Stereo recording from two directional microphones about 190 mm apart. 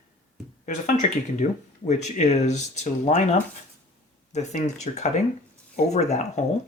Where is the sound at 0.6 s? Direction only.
40° left (ahead or behind).